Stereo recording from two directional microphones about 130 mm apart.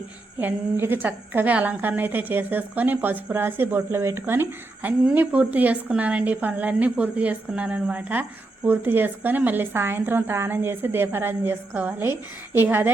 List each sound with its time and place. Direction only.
0.3 s a woman's voice: 15° right (ahead or behind)